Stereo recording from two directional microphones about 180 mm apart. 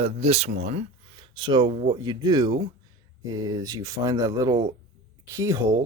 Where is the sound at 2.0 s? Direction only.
20° right (ahead or behind).